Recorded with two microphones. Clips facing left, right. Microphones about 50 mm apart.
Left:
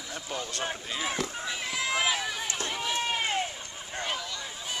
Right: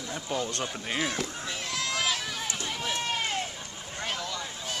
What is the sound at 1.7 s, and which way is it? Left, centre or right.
Run, centre.